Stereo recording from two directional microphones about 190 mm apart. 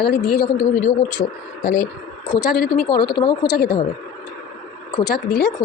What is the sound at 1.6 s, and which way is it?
Speech, 40° left (ahead or behind).